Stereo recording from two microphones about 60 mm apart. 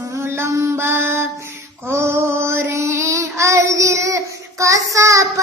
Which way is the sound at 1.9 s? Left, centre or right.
Right.